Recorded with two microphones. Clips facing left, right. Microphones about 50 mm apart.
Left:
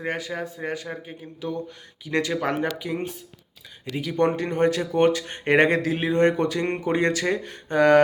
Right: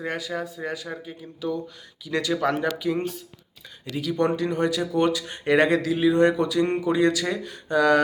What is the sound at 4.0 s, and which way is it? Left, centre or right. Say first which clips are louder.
Speech: left 1 dB; left.